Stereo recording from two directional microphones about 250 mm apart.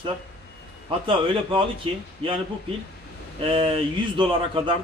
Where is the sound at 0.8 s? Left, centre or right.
Right.